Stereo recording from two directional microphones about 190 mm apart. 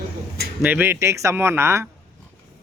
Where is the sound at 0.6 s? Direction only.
10° right (ahead or behind).